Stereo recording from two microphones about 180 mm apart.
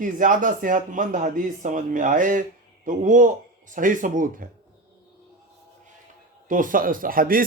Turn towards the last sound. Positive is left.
turn(degrees=-50)  # may be behind; listen again after turning